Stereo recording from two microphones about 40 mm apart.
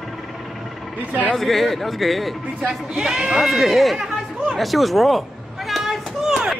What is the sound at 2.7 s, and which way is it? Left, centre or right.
Speech, centre.